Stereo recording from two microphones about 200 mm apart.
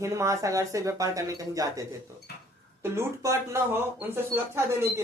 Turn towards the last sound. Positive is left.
turn(degrees=-10)  # may be behind; listen again after turning